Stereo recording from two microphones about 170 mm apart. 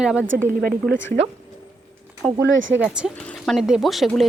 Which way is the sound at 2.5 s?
90° right.